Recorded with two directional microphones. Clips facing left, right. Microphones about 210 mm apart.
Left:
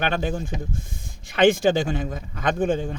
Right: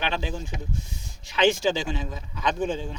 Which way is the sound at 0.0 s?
50° left (ahead or behind).